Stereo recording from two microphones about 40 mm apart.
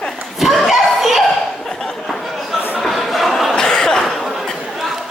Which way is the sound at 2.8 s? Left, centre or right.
Centre.